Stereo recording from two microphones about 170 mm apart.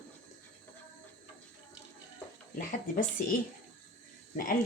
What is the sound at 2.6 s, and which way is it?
Speech, 55° left (ahead or behind).